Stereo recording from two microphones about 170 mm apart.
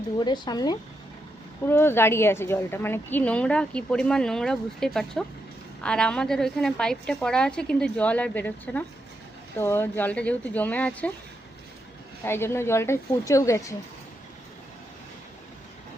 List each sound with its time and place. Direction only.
0.2 s a woman's voice: 25° left (ahead or behind); by 11.1 s 10° left (ahead or behind)
12.2 s a woman's voice: 15° left (ahead or behind)